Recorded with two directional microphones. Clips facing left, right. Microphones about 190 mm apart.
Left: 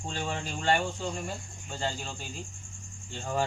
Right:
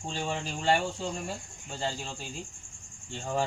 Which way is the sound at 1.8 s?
5° right (ahead or behind).